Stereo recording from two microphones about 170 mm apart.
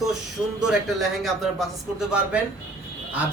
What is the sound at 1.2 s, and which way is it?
Speech, centre (ahead or behind).